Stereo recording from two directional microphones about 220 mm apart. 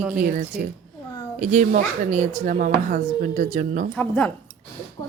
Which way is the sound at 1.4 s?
35° right (ahead or behind).